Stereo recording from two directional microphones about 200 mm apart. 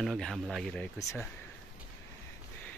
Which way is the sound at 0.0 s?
Centre (ahead or behind).